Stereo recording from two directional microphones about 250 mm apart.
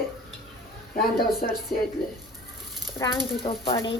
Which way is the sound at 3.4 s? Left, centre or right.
Left.